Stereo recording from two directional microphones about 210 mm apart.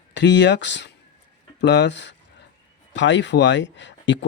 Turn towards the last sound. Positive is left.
turn(degrees=60)  # may be behind; listen again after turning